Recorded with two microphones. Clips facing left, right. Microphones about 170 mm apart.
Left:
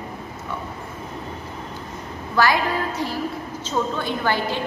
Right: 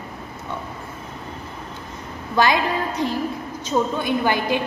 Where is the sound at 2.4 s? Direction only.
20° right (ahead or behind).